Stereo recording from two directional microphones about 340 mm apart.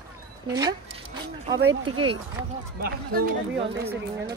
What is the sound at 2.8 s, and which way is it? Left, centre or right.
Speech, right.